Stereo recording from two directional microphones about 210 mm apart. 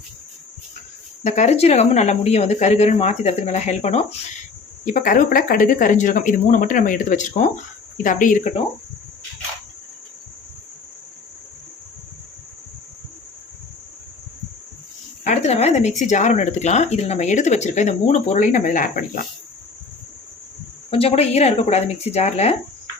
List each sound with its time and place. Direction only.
1.2 s speech: 35° left (ahead or behind)
15.3 s speech: 30° left (ahead or behind)
20.9 s speech: 30° left (ahead or behind)